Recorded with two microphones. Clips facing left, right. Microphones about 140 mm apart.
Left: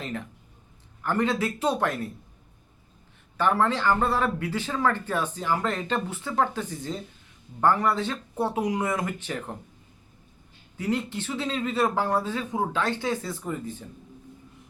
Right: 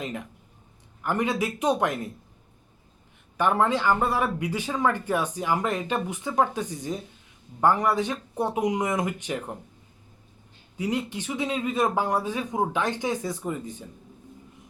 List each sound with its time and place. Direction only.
0.0 s speech: 15° right (ahead or behind)
3.3 s speech: 15° right (ahead or behind)
10.8 s speech: 15° right (ahead or behind)